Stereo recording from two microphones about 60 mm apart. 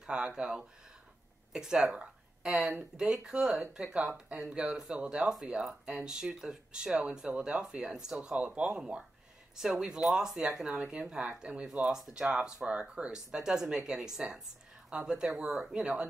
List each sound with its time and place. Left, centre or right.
0.0 s speech: centre